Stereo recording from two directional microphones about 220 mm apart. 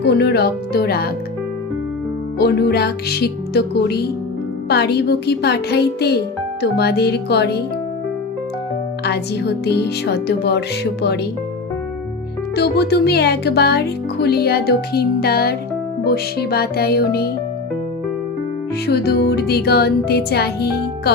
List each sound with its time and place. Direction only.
0.0 s speech: 45° left (ahead or behind)
2.4 s speech: 45° left (ahead or behind)
9.0 s speech: 50° left (ahead or behind)
12.5 s speech: 50° left (ahead or behind)
18.9 s speech: 45° left (ahead or behind)